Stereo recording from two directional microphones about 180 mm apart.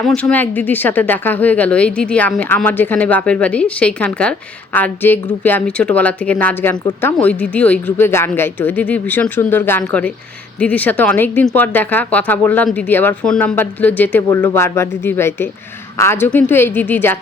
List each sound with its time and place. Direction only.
0.0 s a woman's voice: 5° left (ahead or behind)